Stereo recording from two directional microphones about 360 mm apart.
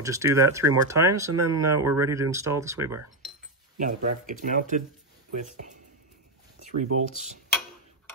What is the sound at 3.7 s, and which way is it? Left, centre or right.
Speech, right.